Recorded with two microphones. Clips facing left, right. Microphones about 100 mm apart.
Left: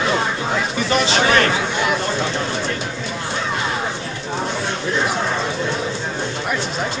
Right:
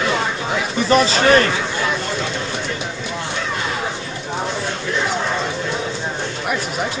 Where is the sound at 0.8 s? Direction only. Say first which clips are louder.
Right 4 dB; 35° right (ahead or behind).